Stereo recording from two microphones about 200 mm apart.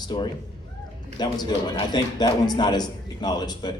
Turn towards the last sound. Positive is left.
turn(degrees=20)  # may be behind; listen again after turning